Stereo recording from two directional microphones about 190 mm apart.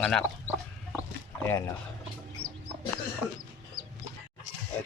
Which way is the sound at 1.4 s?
15° left (ahead or behind).